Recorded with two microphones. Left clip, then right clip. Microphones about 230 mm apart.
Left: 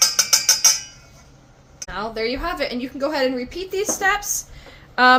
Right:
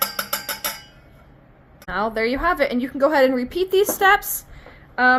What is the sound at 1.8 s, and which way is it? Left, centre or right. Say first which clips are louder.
A woman's voice: right 3 dB; right.